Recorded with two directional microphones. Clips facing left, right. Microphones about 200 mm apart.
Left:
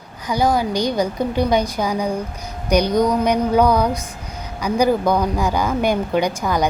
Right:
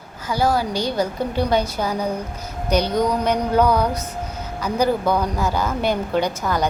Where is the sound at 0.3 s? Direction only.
15° left (ahead or behind).